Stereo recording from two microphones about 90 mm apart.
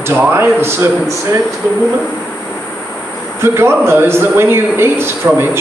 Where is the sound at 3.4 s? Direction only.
30° right (ahead or behind).